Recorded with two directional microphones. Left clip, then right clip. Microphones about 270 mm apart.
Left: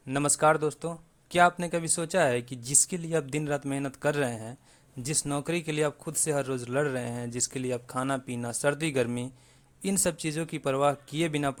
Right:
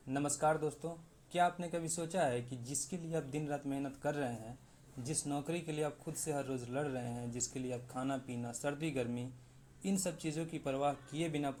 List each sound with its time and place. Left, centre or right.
0.1 s speech: left